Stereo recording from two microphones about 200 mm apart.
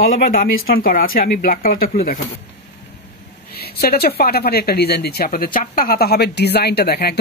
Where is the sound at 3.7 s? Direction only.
50° left (ahead or behind).